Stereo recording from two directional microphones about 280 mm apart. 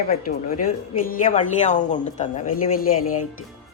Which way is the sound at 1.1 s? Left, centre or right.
Left.